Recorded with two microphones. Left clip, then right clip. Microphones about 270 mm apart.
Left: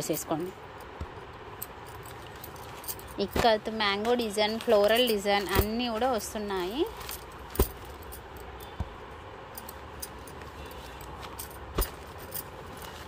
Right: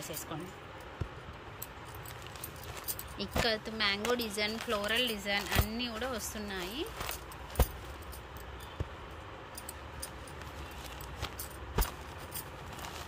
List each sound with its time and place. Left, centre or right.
0.3 s speech: centre
3.2 s speech: centre